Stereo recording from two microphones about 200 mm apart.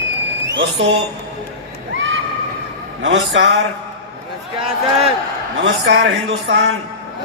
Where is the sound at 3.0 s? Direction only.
65° right (ahead or behind).